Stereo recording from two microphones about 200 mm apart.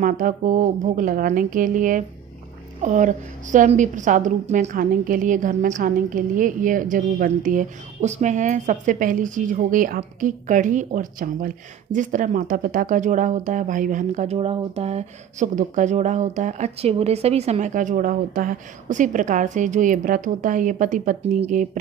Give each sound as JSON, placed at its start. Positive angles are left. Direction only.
{"t": 0.0, "sound": "a woman's voice", "side_deg": -40}